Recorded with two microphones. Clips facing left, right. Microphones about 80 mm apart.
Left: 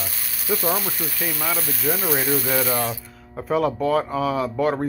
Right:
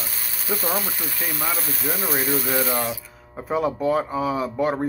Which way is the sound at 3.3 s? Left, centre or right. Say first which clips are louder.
Left 2 dB; centre.